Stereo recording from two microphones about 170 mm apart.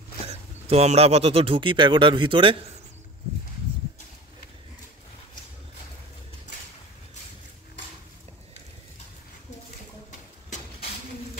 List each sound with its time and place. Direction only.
0.3 s speech: 40° right (ahead or behind)